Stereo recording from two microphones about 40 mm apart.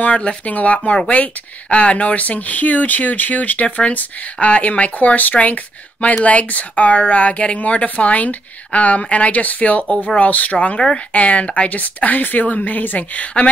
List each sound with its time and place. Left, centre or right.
0.5 s speech: left